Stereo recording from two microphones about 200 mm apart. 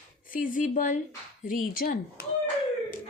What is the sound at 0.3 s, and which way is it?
Speech, 40° left (ahead or behind).